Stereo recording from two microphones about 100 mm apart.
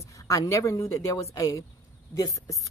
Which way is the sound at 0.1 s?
30° left (ahead or behind).